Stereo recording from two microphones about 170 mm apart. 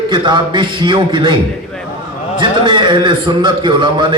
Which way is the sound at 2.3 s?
30° right (ahead or behind).